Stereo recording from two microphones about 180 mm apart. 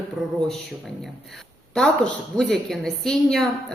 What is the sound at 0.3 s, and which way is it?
Speech, centre (ahead or behind).